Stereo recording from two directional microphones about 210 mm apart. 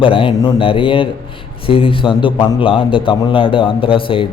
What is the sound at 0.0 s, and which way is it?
Speech, 25° left (ahead or behind).